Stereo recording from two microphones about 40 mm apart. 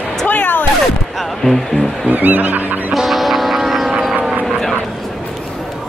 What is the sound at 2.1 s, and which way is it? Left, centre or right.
Snicker, right.